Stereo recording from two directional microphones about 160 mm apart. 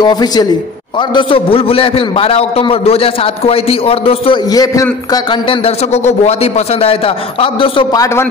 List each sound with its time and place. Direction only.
0.0 s a man's voice: 25° left (ahead or behind)
4.5 s a man's voice: 25° left (ahead or behind)
8.0 s a man's voice: 15° left (ahead or behind)